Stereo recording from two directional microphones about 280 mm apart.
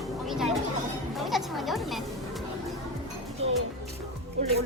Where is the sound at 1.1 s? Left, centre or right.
Centre.